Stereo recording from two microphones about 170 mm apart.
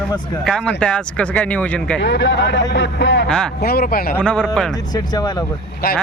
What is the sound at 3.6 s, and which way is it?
Speech, 65° left (ahead or behind).